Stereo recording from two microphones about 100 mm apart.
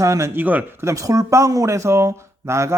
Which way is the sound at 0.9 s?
35° right (ahead or behind).